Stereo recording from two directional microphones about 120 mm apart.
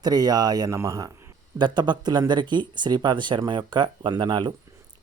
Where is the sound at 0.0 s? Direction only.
35° right (ahead or behind).